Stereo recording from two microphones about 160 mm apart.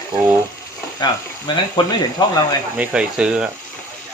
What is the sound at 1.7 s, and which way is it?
Speech, 25° left (ahead or behind).